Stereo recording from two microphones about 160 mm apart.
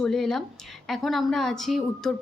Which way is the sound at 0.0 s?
5° left (ahead or behind).